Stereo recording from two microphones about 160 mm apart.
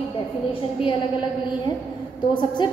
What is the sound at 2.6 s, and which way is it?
Speech, 30° left (ahead or behind).